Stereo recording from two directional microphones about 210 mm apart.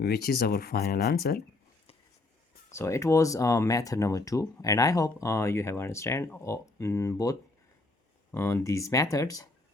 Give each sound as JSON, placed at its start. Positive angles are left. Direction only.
{"t": 0.0, "sound": "speech", "side_deg": 50}
{"t": 2.7, "sound": "speech", "side_deg": 15}